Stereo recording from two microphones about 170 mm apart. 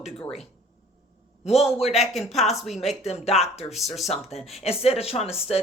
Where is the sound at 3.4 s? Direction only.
40° left (ahead or behind).